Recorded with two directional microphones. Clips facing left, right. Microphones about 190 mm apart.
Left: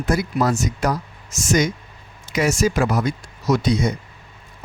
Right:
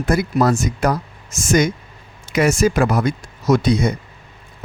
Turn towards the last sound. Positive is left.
turn(degrees=-55)  # may be behind; listen again after turning